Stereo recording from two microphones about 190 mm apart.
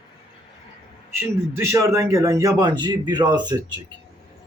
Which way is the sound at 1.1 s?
15° right (ahead or behind).